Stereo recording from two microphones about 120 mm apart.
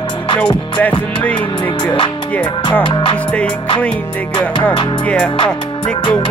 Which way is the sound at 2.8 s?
40° left (ahead or behind).